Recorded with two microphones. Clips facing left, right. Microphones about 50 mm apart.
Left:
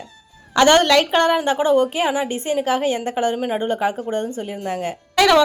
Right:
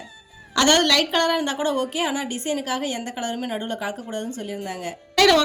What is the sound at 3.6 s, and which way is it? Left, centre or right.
Speech, left.